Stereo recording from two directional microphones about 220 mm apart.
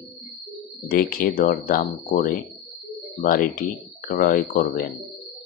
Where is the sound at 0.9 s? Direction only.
40° left (ahead or behind).